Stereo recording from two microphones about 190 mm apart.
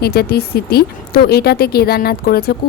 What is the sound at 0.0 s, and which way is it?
Speech, 55° left (ahead or behind).